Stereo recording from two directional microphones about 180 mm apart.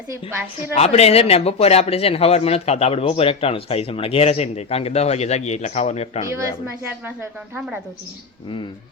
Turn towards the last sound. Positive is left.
turn(degrees=-10)  # may be behind; listen again after turning